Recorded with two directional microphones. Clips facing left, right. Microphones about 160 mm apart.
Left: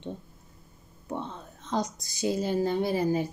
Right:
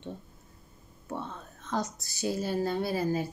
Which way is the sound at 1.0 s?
20° left (ahead or behind).